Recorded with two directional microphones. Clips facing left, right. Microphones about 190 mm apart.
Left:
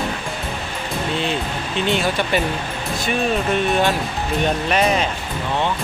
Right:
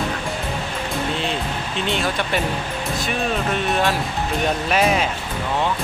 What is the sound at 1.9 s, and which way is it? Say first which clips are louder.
Speech: left 3 dB; centre (ahead or behind).